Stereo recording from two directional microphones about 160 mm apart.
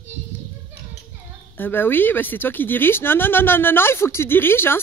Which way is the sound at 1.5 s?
10° left (ahead or behind).